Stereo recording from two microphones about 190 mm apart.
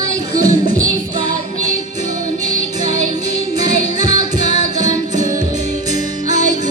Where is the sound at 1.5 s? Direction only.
40° right (ahead or behind).